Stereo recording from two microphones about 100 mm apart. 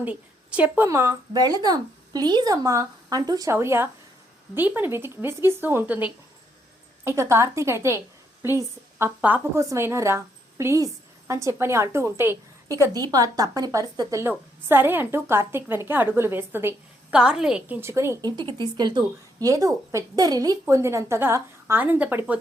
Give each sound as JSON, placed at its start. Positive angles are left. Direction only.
{"t": 0.0, "sound": "a woman's voice", "side_deg": -15}
{"t": 0.9, "sound": "a woman's voice", "side_deg": -30}
{"t": 1.3, "sound": "a woman's voice", "side_deg": -40}
{"t": 3.5, "sound": "a woman's voice", "side_deg": -25}
{"t": 7.0, "sound": "a woman's voice", "side_deg": -25}
{"t": 14.2, "sound": "a woman's voice", "side_deg": -20}
{"t": 17.1, "sound": "a woman's voice", "side_deg": -10}
{"t": 17.7, "sound": "a woman's voice", "side_deg": -25}
{"t": 18.3, "sound": "a woman's voice", "side_deg": -50}